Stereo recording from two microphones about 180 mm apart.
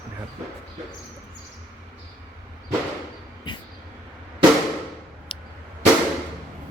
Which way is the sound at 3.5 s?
25° left (ahead or behind).